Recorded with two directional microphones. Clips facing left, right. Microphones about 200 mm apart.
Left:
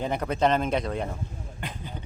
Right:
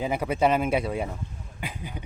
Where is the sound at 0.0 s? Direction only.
5° right (ahead or behind).